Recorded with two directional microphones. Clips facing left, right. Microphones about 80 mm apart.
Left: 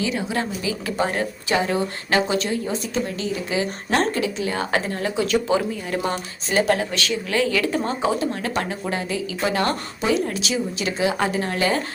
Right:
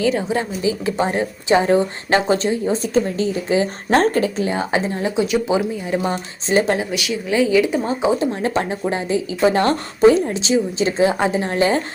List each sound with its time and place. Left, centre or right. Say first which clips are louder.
0.0 s a woman's voice: right 5 dB; right
4.4 s speech: right 3 dB; centre
6.9 s speech: right 3 dB; centre
8.2 s speech: right 4 dB; right
10.2 s speech: right 6 dB; right